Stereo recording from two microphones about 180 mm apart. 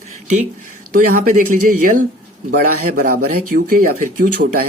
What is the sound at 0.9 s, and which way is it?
Speech, 50° right (ahead or behind).